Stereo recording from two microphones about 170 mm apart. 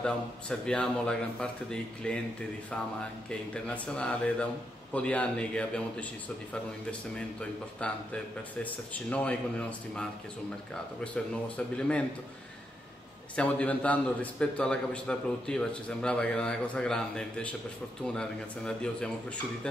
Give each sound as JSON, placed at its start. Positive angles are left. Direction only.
{"t": 0.0, "sound": "a man's voice", "side_deg": 5}
{"t": 3.3, "sound": "a man's voice", "side_deg": 5}
{"t": 11.4, "sound": "a man's voice", "side_deg": 5}
{"t": 13.4, "sound": "a man's voice", "side_deg": 5}